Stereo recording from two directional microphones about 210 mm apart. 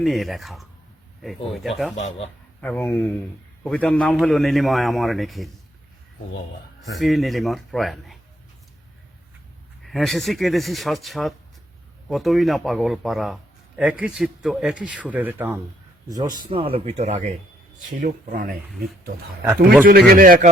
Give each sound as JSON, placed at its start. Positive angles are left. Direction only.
{"t": 0.0, "sound": "a man's voice", "side_deg": 0}
{"t": 2.0, "sound": "a man's voice", "side_deg": 30}
{"t": 2.6, "sound": "a man's voice", "side_deg": 5}
{"t": 6.9, "sound": "a man's voice", "side_deg": 0}
{"t": 9.8, "sound": "a man's voice", "side_deg": 0}
{"t": 19.8, "sound": "speech", "side_deg": -45}